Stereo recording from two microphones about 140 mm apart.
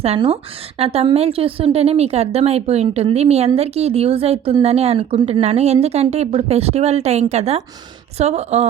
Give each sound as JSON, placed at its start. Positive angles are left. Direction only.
{"t": 0.8, "sound": "a woman's voice", "side_deg": -45}